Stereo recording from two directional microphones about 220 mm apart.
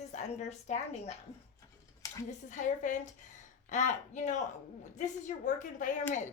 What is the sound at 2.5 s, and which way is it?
A woman's voice, 35° left (ahead or behind).